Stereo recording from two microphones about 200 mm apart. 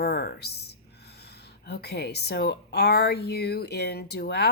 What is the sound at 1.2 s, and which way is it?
Speech, 55° left (ahead or behind).